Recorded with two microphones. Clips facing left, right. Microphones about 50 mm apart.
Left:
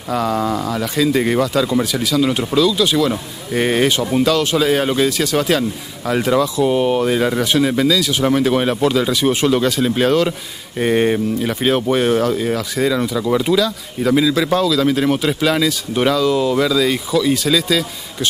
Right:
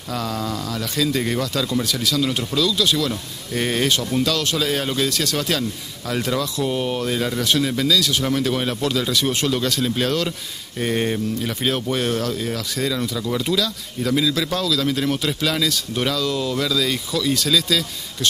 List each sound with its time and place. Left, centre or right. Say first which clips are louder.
0.1 s speech: left 7 dB; centre